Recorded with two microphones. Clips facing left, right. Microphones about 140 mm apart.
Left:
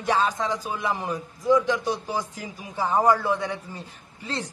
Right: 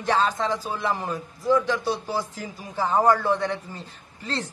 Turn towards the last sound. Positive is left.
turn(degrees=10)  # may be behind; listen again after turning